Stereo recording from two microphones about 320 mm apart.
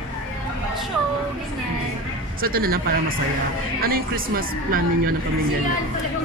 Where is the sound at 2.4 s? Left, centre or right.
Right.